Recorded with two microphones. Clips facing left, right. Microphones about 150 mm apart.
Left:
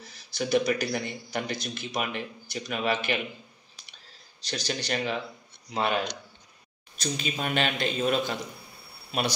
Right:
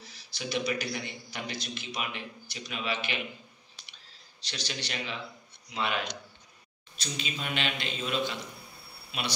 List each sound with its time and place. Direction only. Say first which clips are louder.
0.0 s a man's voice: left 7 dB; 50° left (ahead or behind)
4.4 s a man's voice: left 6 dB; 45° left (ahead or behind)